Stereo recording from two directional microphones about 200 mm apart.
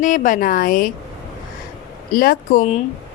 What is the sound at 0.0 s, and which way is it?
Speech, 40° left (ahead or behind).